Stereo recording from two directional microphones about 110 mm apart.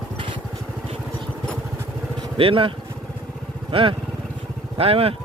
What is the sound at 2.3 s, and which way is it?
Speech, 55° right (ahead or behind).